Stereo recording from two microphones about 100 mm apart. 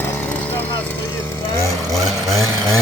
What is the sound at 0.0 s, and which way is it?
Chainsaw, 20° left (ahead or behind).